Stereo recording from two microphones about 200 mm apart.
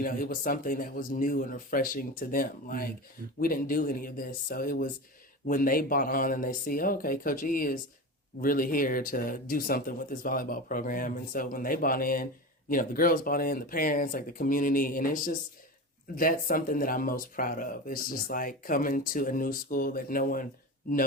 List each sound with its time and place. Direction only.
0.0 s speech: 45° left (ahead or behind)